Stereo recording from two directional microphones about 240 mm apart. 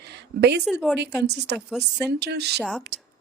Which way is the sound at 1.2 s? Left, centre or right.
Right.